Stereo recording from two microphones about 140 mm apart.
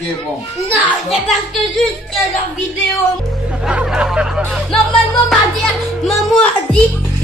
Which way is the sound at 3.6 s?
5° right (ahead or behind).